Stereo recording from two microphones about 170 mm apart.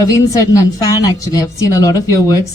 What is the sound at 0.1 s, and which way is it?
A woman's voice, 20° left (ahead or behind).